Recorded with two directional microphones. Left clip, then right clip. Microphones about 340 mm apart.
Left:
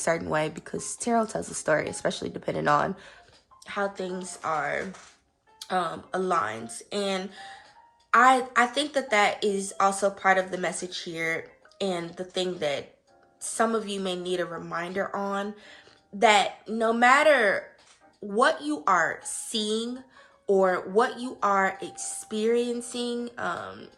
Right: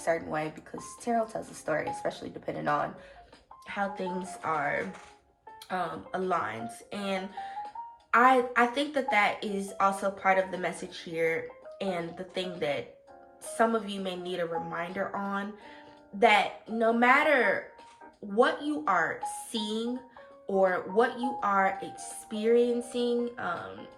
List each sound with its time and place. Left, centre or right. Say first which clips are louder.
0.0 s speech: left 4 dB; left
3.7 s a woman's voice: left 2 dB; centre